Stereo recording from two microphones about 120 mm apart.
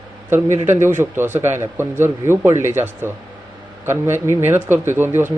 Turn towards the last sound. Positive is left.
turn(degrees=-20)  # may be behind; listen again after turning